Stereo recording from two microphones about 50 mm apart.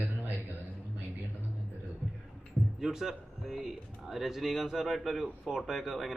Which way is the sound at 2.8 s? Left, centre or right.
Centre.